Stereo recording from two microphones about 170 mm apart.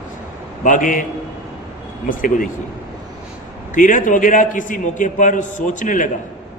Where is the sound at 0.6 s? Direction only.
50° left (ahead or behind).